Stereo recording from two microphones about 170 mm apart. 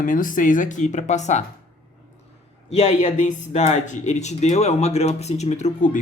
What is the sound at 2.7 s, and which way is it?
Speech, 40° left (ahead or behind).